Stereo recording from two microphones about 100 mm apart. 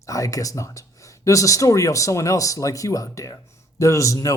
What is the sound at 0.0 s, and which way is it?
A man's voice, 35° left (ahead or behind).